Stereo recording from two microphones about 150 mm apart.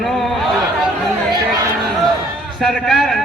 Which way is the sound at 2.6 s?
Centre (ahead or behind).